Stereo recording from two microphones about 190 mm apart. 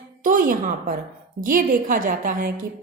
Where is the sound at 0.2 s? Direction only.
45° right (ahead or behind).